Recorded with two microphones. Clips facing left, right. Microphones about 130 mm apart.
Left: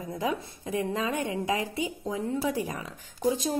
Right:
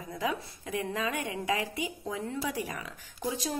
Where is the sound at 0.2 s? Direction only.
30° left (ahead or behind).